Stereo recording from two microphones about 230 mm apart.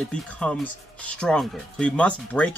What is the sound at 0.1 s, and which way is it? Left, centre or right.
Speech, centre.